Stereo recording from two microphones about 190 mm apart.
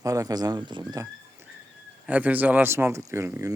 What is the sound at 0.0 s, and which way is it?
Speech, 15° right (ahead or behind).